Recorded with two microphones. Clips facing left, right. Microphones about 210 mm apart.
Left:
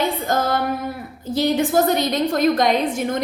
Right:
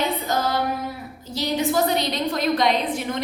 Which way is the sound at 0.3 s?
50° left (ahead or behind).